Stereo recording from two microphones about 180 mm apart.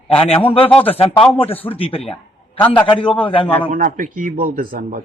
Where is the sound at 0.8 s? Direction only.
30° left (ahead or behind).